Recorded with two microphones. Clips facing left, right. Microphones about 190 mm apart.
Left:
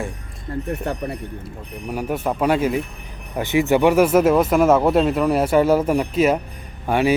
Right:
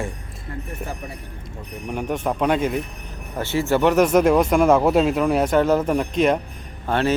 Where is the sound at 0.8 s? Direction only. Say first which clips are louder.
Left 6 dB; 65° left (ahead or behind).